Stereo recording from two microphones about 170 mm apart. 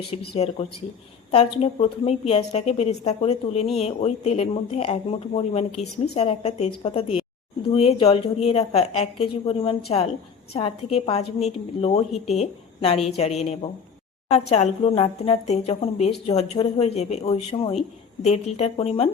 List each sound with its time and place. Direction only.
0.1 s speech: 40° left (ahead or behind)
1.6 s speech: 35° left (ahead or behind)